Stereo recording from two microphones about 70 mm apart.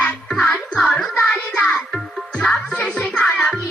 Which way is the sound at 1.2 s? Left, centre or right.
Centre.